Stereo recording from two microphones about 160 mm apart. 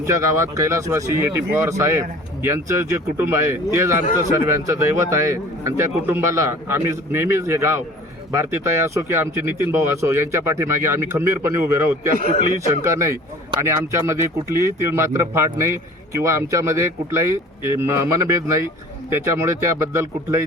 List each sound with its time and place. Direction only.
0.0 s speech: 20° right (ahead or behind)